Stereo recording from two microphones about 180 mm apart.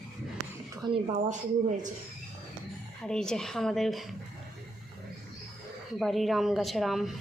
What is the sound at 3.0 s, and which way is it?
A woman's voice, 5° left (ahead or behind).